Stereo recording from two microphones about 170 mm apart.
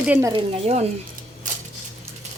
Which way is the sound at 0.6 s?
40° right (ahead or behind).